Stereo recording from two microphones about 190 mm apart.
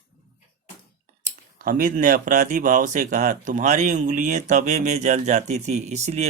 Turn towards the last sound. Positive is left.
turn(degrees=-35)  # may be behind; listen again after turning